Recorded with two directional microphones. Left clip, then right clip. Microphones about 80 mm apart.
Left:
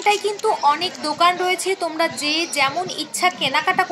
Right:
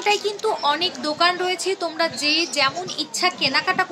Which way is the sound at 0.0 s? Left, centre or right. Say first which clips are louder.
Left 2 dB; left.